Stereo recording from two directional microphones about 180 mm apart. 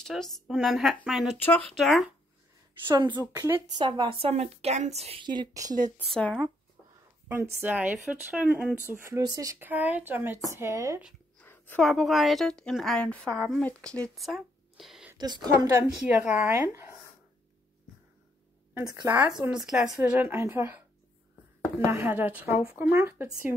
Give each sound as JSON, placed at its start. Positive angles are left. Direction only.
{"t": 0.0, "sound": "a woman's voice", "side_deg": 0}
{"t": 2.9, "sound": "a woman's voice", "side_deg": -25}
{"t": 6.1, "sound": "a woman's voice", "side_deg": 5}
{"t": 7.2, "sound": "speech", "side_deg": -15}
{"t": 11.3, "sound": "a woman's voice", "side_deg": 10}
{"t": 15.1, "sound": "speech", "side_deg": -25}
{"t": 16.1, "sound": "speech", "side_deg": -10}
{"t": 18.8, "sound": "speech", "side_deg": -15}